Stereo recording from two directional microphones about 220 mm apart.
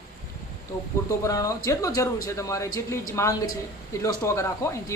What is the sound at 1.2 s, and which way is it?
A man's voice, 15° left (ahead or behind).